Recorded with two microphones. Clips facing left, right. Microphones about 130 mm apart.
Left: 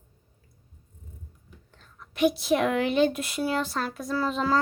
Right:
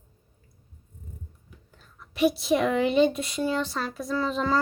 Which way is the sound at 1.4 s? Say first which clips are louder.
Even; 5° right (ahead or behind).